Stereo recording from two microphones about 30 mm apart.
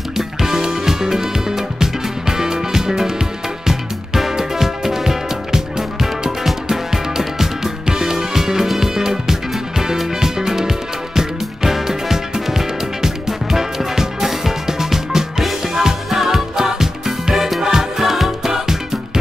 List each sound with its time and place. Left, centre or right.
0.2 s music: centre
18.0 s music: centre